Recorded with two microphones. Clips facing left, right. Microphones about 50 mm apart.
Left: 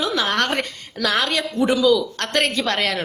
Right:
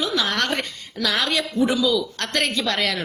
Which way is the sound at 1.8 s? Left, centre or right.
Left.